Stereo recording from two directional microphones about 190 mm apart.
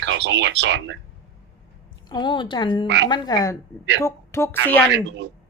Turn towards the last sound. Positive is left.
turn(degrees=-70)  # may be behind; listen again after turning